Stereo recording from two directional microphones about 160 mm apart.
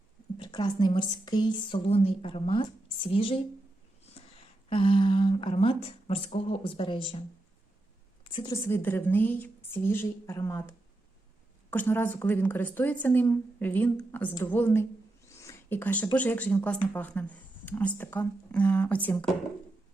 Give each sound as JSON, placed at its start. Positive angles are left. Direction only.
{"t": 0.3, "sound": "speech", "side_deg": 30}
{"t": 4.7, "sound": "speech", "side_deg": 35}
{"t": 8.2, "sound": "a sound", "side_deg": 30}
{"t": 8.6, "sound": "a woman's voice", "side_deg": 15}
{"t": 15.4, "sound": "a sound", "side_deg": 15}
{"t": 16.1, "sound": "a woman's voice", "side_deg": 10}